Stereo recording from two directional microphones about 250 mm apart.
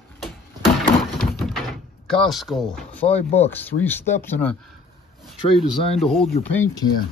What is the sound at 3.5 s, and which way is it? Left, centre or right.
Speech, centre.